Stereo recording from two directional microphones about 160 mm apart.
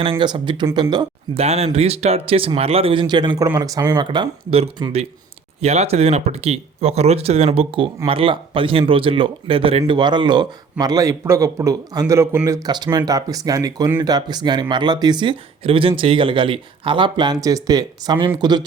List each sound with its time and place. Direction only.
0.0 s speech: 30° right (ahead or behind)